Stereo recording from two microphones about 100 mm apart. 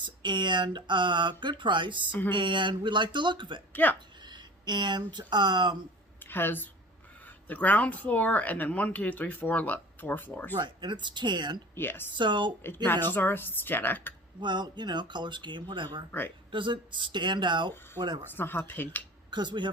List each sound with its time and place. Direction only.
0.0 s speech: 50° right (ahead or behind)
3.7 s speech: 20° left (ahead or behind)
4.3 s speech: 50° right (ahead or behind)
6.2 s speech: 20° left (ahead or behind)
10.6 s speech: 50° right (ahead or behind)
11.7 s speech: 20° left (ahead or behind)
12.1 s speech: 50° right (ahead or behind)
12.6 s speech: 20° left (ahead or behind)
14.4 s speech: 50° right (ahead or behind)
18.3 s speech: 20° left (ahead or behind)
19.3 s speech: 50° right (ahead or behind)